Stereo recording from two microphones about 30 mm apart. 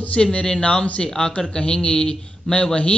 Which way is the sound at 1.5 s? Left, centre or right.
Left.